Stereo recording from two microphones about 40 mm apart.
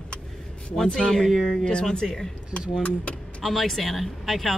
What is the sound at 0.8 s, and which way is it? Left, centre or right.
Speech, centre.